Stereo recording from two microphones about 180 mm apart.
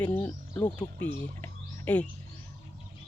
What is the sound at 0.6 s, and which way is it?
Speech, 25° left (ahead or behind).